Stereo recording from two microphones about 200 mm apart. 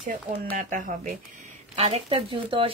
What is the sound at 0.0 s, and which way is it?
Speech, 40° right (ahead or behind).